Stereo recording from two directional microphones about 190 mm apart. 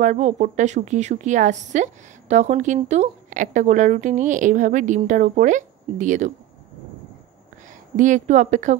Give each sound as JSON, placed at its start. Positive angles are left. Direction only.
{"t": 0.0, "sound": "a woman's voice", "side_deg": -40}
{"t": 7.9, "sound": "a woman's voice", "side_deg": -40}